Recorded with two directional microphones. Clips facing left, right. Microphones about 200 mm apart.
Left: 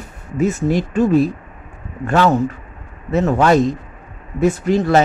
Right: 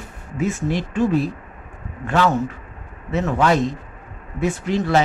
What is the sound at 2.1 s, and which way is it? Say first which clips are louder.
Speech: left 4 dB; 40° left (ahead or behind).